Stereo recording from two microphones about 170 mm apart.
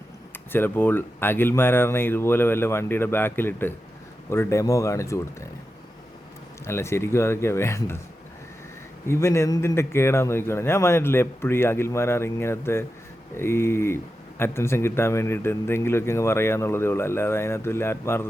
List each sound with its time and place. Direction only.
0.5 s speech: 10° left (ahead or behind)
6.7 s speech: 15° left (ahead or behind)
9.0 s speech: 15° left (ahead or behind)